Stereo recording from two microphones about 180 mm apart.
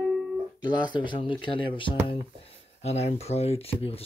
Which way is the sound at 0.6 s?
25° left (ahead or behind).